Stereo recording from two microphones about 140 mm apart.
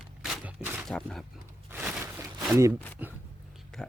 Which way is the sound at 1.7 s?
10° right (ahead or behind).